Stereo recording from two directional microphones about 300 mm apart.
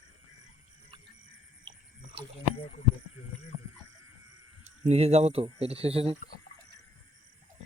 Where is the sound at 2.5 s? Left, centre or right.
Centre.